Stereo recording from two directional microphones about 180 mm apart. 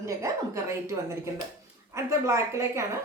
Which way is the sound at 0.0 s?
15° right (ahead or behind).